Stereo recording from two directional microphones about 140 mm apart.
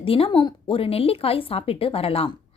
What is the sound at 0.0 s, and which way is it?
Speech, 40° left (ahead or behind).